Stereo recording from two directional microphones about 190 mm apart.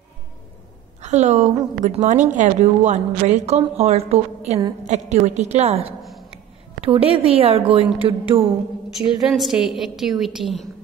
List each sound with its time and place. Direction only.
1.0 s a woman's voice: 35° right (ahead or behind)
5.9 s a sound: centre (ahead or behind)
7.2 s a woman's voice: 30° right (ahead or behind)
8.9 s a woman's voice: centre (ahead or behind)